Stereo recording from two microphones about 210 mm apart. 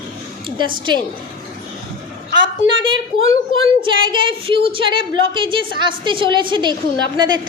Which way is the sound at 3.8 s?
25° right (ahead or behind).